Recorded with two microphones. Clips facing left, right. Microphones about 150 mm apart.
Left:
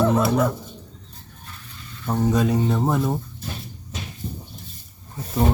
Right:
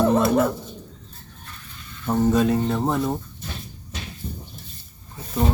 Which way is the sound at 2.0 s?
Centre (ahead or behind).